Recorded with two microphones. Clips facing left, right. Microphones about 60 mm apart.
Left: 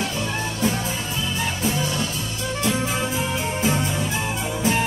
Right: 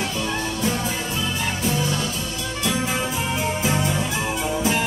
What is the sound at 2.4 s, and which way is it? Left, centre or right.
Music, left.